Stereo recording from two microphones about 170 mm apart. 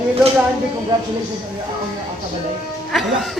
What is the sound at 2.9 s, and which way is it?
Speech, centre (ahead or behind).